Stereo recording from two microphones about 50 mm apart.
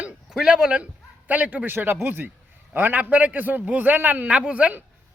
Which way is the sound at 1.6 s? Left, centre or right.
Right.